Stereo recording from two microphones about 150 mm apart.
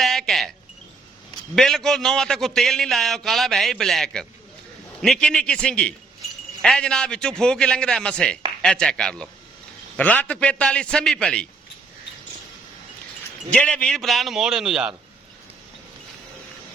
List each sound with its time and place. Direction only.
0.0 s a sound: centre (ahead or behind)
1.5 s a man's voice: 5° left (ahead or behind)
13.5 s a man's voice: 5° left (ahead or behind)